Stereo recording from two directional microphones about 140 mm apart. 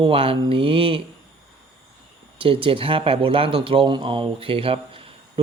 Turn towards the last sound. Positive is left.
turn(degrees=-40)  # may be behind; listen again after turning